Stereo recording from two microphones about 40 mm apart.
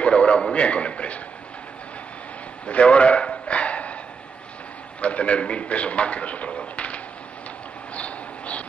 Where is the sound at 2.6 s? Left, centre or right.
Left.